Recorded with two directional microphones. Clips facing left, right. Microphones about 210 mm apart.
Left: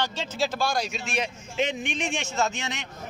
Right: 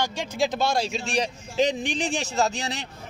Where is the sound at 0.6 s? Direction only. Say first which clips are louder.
Right 3 dB; 25° right (ahead or behind).